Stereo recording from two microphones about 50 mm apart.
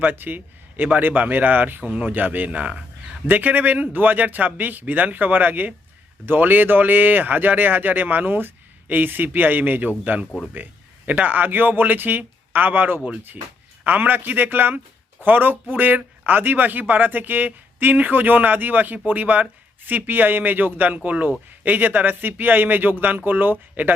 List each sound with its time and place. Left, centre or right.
0.0 s speech: right
2.5 s speech: right
3.2 s a man's voice: right